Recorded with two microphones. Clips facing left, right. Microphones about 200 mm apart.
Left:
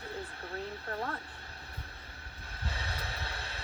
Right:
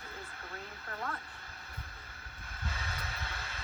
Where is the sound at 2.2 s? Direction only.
30° left (ahead or behind).